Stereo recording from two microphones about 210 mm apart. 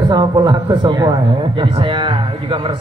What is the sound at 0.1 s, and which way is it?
Speech, 20° right (ahead or behind).